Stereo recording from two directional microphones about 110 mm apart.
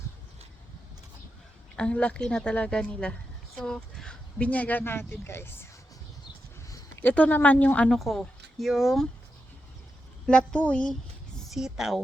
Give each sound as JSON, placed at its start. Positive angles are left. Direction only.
{"t": 1.7, "sound": "speech", "side_deg": 10}
{"t": 7.0, "sound": "speech", "side_deg": 15}
{"t": 7.9, "sound": "speech", "side_deg": 0}
{"t": 10.2, "sound": "speech", "side_deg": 10}
{"t": 11.5, "sound": "speech", "side_deg": -5}